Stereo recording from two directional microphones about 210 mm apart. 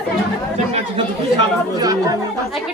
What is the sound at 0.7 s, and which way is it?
Speech, 25° right (ahead or behind).